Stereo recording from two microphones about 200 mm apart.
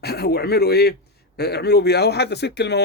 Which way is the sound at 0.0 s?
50° left (ahead or behind).